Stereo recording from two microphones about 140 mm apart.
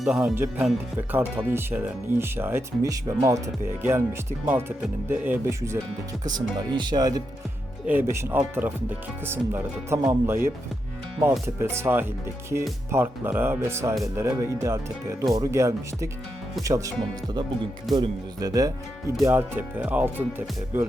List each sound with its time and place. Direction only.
0.0 s speech: 5° right (ahead or behind)
6.2 s speech: 30° right (ahead or behind)
7.9 s speech: 15° right (ahead or behind)
17.9 s speech: 25° right (ahead or behind)
19.2 s speech: 15° right (ahead or behind)